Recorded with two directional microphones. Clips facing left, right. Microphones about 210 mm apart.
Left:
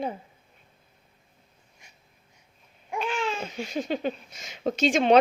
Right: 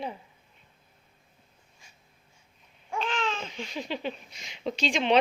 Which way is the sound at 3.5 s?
45° left (ahead or behind).